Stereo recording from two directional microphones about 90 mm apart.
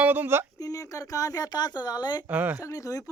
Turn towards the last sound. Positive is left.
turn(degrees=40)  # may be behind; listen again after turning